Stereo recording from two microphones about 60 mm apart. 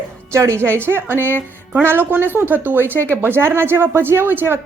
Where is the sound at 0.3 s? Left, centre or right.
Right.